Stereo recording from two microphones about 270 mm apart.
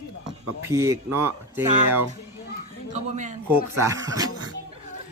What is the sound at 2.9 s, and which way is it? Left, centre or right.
Speech, right.